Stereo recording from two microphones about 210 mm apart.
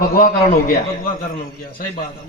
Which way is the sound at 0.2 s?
40° left (ahead or behind).